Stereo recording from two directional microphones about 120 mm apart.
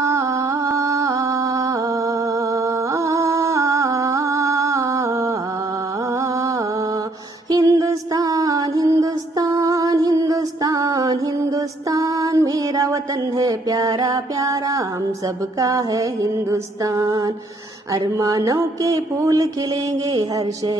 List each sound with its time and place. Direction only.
0.7 s a sound: 25° right (ahead or behind)
2.9 s music: 25° right (ahead or behind)
7.5 s music: 30° right (ahead or behind)
15.6 s mantra: 30° right (ahead or behind)